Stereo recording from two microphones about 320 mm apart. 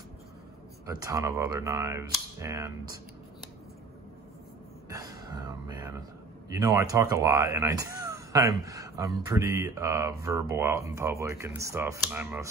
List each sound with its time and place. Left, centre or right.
0.8 s speech: centre
4.8 s a sound: centre
6.5 s speech: centre